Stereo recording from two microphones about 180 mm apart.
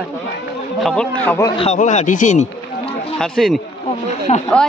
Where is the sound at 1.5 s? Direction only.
35° left (ahead or behind).